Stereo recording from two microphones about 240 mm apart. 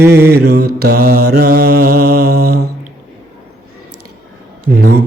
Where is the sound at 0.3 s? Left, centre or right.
Right.